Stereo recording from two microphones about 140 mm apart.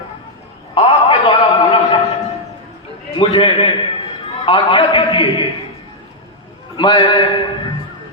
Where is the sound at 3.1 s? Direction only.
35° left (ahead or behind).